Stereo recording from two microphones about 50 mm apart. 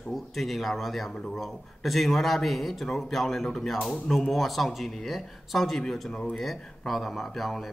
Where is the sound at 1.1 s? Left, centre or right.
Centre.